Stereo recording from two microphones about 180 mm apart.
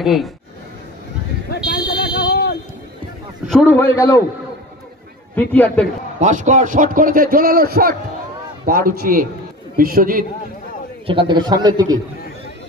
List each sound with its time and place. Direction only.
0.0 s speech: centre (ahead or behind)
1.5 s a sound: 65° left (ahead or behind)
3.4 s a man's voice: 5° left (ahead or behind)
5.3 s a man's voice: 10° left (ahead or behind)
6.1 s a man's voice: 40° right (ahead or behind)
11.1 s a man's voice: 25° right (ahead or behind)